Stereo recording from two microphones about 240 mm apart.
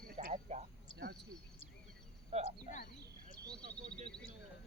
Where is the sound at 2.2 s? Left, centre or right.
Right.